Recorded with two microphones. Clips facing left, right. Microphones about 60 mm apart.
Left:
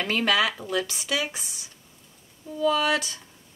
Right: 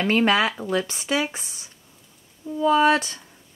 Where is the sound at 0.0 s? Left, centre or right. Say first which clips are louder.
Right 4 dB; right.